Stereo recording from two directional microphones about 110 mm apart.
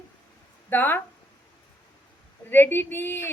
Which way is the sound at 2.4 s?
20° left (ahead or behind).